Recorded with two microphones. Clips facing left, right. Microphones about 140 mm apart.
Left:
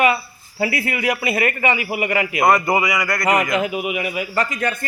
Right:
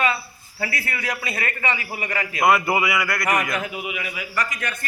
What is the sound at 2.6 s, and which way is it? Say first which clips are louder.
Speech: left 3 dB; 5° right (ahead or behind).